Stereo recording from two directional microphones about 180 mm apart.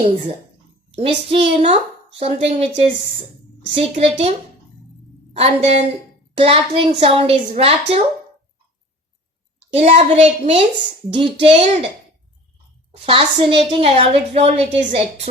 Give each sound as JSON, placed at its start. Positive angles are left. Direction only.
{"t": 0.9, "sound": "a woman's voice", "side_deg": -30}
{"t": 9.7, "sound": "a woman's voice", "side_deg": -35}
{"t": 13.1, "sound": "a woman's voice", "side_deg": -30}